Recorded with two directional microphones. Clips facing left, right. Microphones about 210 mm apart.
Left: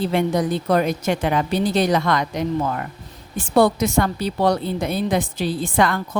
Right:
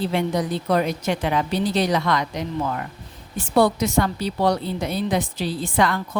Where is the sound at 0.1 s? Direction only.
50° left (ahead or behind).